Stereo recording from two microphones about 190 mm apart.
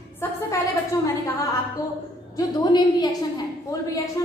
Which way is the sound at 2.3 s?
20° left (ahead or behind).